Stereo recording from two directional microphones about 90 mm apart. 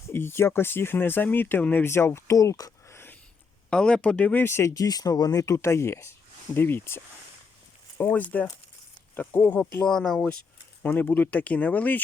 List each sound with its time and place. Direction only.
0.1 s speech: 25° left (ahead or behind)
3.7 s speech: 10° left (ahead or behind)